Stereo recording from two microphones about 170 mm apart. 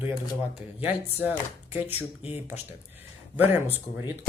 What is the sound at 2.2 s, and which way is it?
Speech, 35° left (ahead or behind).